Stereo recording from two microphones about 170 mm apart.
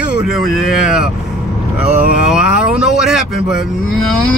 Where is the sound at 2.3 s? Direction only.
5° right (ahead or behind).